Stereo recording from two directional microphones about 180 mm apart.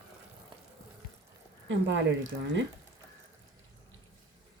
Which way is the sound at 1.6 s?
85° right.